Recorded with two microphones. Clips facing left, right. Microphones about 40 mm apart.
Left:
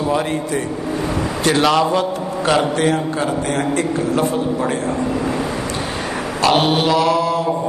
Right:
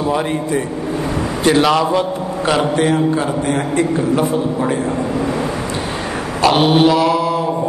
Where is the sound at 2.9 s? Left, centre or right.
Centre.